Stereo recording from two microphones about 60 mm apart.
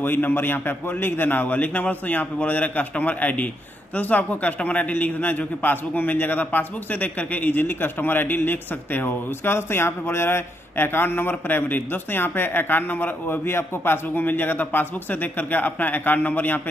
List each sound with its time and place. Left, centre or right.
0.0 s a man's voice: left